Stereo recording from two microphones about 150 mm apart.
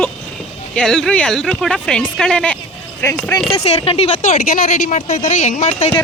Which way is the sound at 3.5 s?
40° left (ahead or behind).